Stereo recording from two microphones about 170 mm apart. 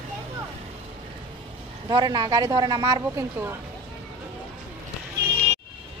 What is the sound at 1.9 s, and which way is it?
A woman's voice, 25° right (ahead or behind).